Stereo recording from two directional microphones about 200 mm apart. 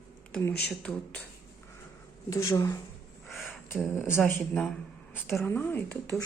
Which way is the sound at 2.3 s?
15° left (ahead or behind).